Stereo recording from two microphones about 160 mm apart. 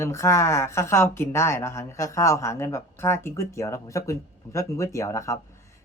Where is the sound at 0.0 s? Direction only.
15° left (ahead or behind).